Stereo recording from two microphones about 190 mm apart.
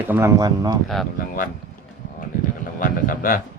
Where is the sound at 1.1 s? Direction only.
45° left (ahead or behind).